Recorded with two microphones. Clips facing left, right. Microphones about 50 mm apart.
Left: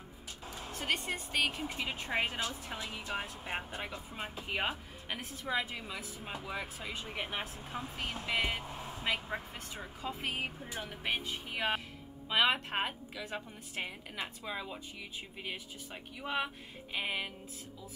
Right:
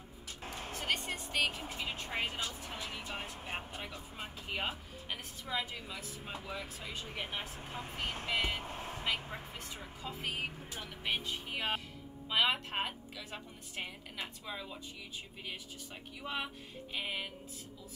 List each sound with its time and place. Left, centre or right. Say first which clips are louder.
0.4 s a sound: right 2 dB; right
0.7 s speech: left 2 dB; centre
1.8 s a woman's voice: left 3 dB; centre
6.5 s a woman's voice: left 4 dB; left
8.7 s a sound: right 1 dB; right
9.0 s a woman's voice: left 3 dB; left